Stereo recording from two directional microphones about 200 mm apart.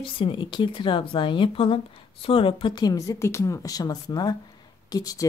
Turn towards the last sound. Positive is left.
turn(degrees=20)  # may be behind; listen again after turning